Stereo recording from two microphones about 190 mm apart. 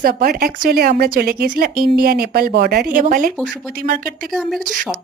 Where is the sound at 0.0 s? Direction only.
55° right (ahead or behind).